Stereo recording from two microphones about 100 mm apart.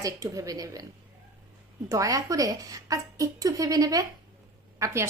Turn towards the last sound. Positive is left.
turn(degrees=-30)  # may be behind; listen again after turning